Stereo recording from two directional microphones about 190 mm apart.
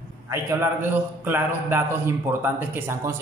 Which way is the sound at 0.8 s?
10° right (ahead or behind).